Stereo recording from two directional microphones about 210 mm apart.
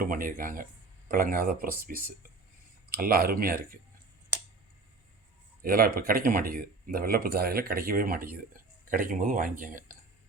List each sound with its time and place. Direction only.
0.0 s speech: 40° right (ahead or behind)
5.6 s speech: 45° right (ahead or behind)